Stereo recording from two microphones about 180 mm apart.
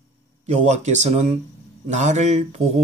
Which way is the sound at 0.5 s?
40° right (ahead or behind).